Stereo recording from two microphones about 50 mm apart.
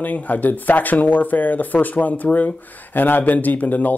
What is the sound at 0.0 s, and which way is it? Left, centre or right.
Speech, left.